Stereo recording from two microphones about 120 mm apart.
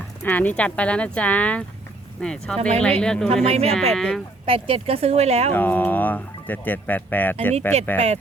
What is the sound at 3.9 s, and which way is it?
Speech, 5° left (ahead or behind).